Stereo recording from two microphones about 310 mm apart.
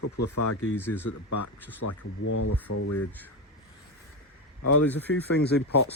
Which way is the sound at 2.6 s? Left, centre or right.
Left.